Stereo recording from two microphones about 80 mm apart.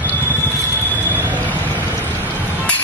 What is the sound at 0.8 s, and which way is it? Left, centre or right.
Vehicle, left.